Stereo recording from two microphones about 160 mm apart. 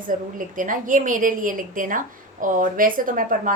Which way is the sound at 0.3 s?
55° right (ahead or behind).